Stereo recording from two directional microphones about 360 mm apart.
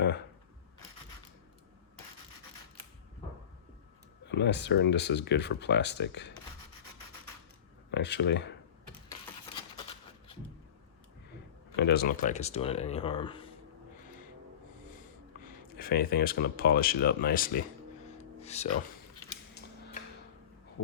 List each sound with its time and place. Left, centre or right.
4.3 s speech: left
7.9 s speech: left
11.8 s speech: left
15.8 s speech: left
18.2 s music: centre